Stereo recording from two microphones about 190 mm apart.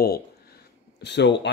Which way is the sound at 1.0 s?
65° left (ahead or behind).